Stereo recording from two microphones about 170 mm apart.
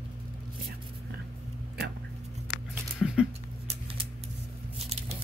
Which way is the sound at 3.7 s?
35° right (ahead or behind).